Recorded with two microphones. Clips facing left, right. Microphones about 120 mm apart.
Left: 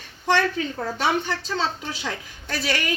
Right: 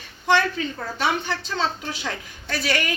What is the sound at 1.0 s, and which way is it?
A woman's voice, 35° left (ahead or behind).